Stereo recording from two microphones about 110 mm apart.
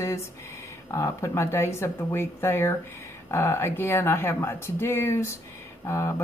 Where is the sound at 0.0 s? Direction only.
25° left (ahead or behind).